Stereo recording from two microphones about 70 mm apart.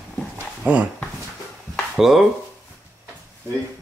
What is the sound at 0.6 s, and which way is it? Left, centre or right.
Speech, right.